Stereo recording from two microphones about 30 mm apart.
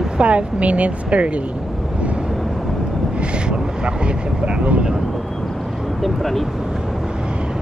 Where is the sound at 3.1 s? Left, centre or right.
Right.